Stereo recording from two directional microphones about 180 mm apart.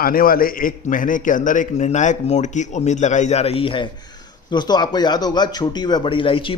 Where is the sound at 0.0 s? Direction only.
55° left (ahead or behind).